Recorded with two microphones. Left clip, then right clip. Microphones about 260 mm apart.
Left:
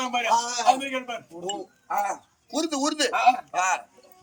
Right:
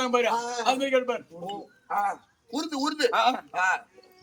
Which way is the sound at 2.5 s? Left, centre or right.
Centre.